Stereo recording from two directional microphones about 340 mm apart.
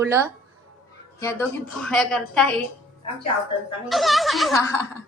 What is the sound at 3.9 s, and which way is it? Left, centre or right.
A woman's voice, centre.